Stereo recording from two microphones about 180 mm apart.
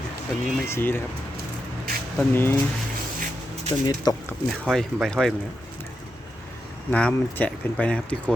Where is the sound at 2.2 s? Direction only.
10° left (ahead or behind).